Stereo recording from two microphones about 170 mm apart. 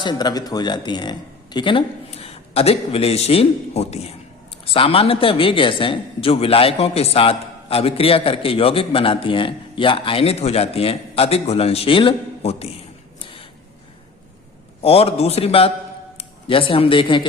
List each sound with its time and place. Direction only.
0.0 s speech: 25° left (ahead or behind)
13.1 s a sound: 30° left (ahead or behind)
14.8 s speech: 35° left (ahead or behind)